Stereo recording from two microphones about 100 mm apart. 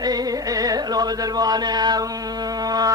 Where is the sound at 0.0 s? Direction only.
40° right (ahead or behind).